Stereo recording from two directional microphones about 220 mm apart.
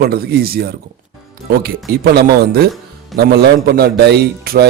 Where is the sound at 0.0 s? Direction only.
45° right (ahead or behind).